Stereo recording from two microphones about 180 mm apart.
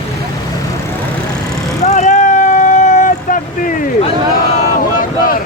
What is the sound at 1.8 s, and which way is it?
Vehicle, 35° left (ahead or behind).